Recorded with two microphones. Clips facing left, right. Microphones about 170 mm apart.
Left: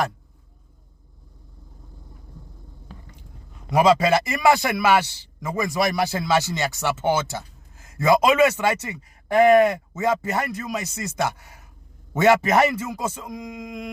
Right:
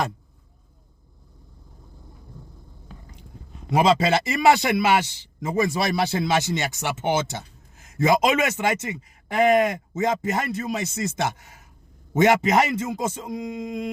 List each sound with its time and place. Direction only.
3.7 s a man's voice: 30° right (ahead or behind)